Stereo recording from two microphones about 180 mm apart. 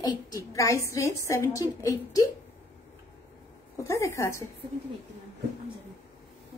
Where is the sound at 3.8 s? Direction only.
15° left (ahead or behind).